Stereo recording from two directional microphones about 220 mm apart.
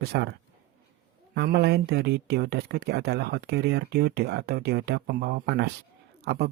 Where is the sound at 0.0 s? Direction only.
45° right (ahead or behind).